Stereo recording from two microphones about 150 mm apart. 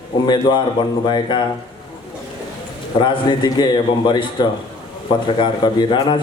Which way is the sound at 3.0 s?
30° left (ahead or behind).